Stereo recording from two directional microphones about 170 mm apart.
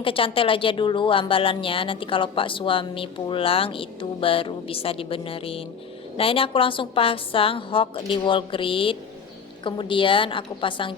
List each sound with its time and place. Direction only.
0.0 s a woman's voice: 30° left (ahead or behind)